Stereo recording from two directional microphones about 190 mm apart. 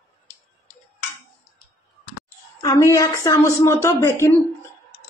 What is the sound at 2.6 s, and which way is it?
A woman's voice, 20° left (ahead or behind).